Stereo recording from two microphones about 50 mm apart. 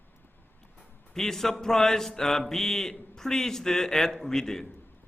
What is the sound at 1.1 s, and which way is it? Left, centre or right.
Speech, centre.